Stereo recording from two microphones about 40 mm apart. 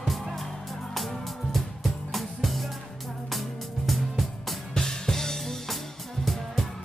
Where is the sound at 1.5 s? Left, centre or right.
Centre.